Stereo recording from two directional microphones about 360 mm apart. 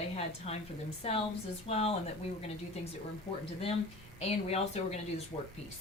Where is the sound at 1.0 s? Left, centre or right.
Centre.